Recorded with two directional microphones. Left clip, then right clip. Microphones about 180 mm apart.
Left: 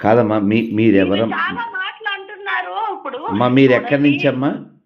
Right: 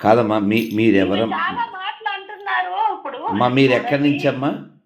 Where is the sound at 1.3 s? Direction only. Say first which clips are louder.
Left 1 dB; 55° left (ahead or behind).